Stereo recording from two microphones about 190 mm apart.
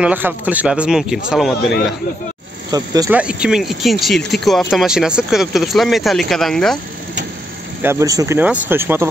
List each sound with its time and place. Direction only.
0.0 s speech: 10° right (ahead or behind)
2.7 s speech: 20° right (ahead or behind)
3.1 s speech: 5° right (ahead or behind)
7.8 s speech: 15° right (ahead or behind)